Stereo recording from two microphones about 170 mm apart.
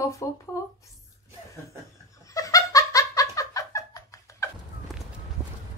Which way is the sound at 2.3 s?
20° left (ahead or behind).